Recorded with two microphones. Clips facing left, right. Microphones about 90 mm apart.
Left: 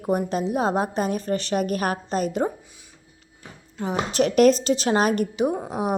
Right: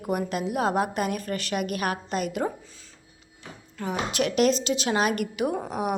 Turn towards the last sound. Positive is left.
turn(degrees=30)  # may be behind; listen again after turning